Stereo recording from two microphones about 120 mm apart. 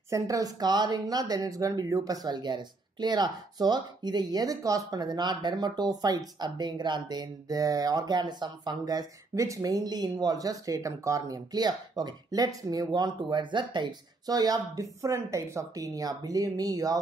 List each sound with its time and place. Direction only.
0.1 s speech: 30° right (ahead or behind)